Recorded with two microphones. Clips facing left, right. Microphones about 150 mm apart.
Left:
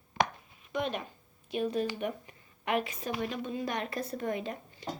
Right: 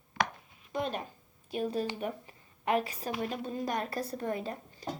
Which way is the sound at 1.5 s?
35° right (ahead or behind).